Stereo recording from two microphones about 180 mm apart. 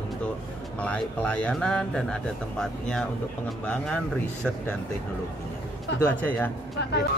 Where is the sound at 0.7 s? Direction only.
5° left (ahead or behind).